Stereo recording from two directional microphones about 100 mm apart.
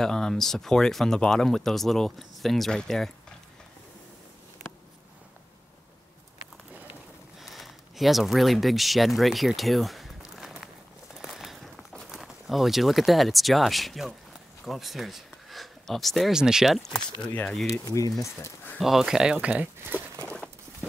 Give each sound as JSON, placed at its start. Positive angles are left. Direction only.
{"t": 0.0, "sound": "speech", "side_deg": 5}
{"t": 7.4, "sound": "speech", "side_deg": 0}
{"t": 11.1, "sound": "a sound", "side_deg": -5}
{"t": 14.6, "sound": "speech", "side_deg": 0}
{"t": 17.8, "sound": "speech", "side_deg": 35}
{"t": 18.8, "sound": "speech", "side_deg": -5}
{"t": 19.4, "sound": "speech", "side_deg": -20}